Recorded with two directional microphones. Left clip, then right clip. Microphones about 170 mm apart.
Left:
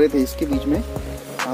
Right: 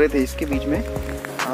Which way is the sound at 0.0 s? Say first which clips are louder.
Left 1 dB; centre (ahead or behind).